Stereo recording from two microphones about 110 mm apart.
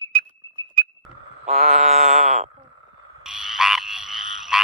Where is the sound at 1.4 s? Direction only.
90° right.